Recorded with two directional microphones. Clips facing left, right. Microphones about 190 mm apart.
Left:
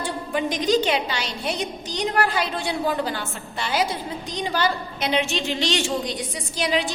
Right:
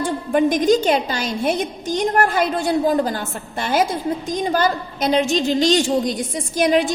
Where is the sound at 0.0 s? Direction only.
50° right (ahead or behind).